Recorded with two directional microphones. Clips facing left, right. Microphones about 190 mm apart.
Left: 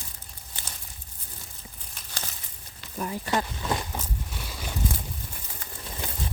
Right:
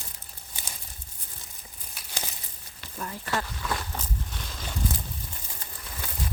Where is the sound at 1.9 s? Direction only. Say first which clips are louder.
Right 2 dB; 10° right (ahead or behind).